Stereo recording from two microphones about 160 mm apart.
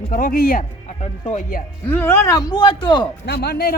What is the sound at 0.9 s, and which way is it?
Speech, 45° left (ahead or behind).